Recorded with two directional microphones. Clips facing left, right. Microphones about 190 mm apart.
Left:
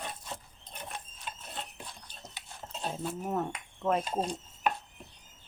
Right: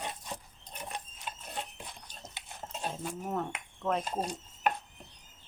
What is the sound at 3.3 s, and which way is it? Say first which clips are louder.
Speech: left 1 dB; 10° left (ahead or behind).